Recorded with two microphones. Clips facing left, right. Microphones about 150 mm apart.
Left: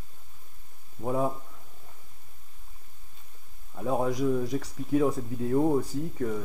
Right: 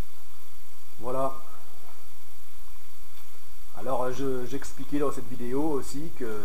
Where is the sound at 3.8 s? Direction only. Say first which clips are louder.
Left 2 dB; centre (ahead or behind).